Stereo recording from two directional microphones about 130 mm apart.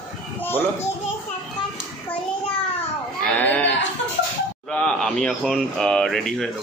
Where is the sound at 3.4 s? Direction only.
15° left (ahead or behind).